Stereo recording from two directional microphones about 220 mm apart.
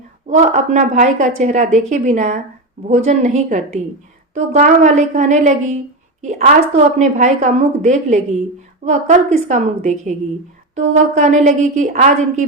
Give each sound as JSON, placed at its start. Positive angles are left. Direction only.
{"t": 0.3, "sound": "a woman's voice", "side_deg": -30}